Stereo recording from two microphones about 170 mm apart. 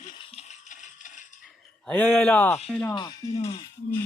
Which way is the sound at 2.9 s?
25° left (ahead or behind).